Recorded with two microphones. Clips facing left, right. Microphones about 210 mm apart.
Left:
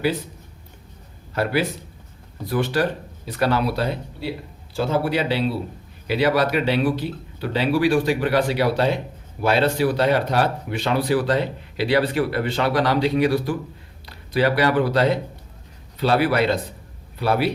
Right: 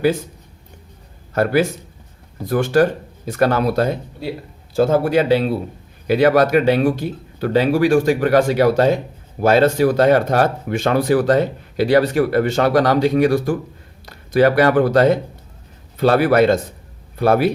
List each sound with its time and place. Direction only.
1.3 s speech: 45° right (ahead or behind)